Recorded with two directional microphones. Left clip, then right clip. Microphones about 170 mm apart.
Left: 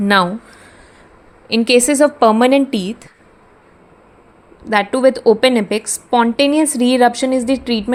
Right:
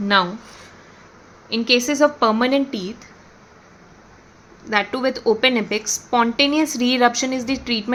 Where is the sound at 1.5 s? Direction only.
45° left (ahead or behind).